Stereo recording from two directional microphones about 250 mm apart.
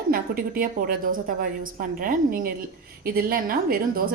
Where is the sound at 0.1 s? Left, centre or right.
Right.